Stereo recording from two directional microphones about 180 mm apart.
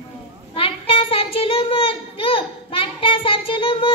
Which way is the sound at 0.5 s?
30° left (ahead or behind).